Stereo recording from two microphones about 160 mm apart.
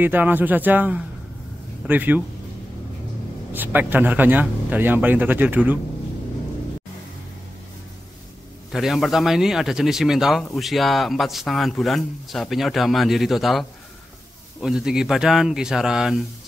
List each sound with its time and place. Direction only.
0.0 s speech: 10° right (ahead or behind)
3.5 s speech: 10° right (ahead or behind)
8.7 s speech: centre (ahead or behind)